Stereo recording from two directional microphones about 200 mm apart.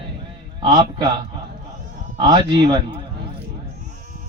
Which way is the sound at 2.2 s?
20° right (ahead or behind).